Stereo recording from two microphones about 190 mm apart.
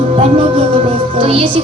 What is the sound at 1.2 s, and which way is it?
Speech, 25° right (ahead or behind).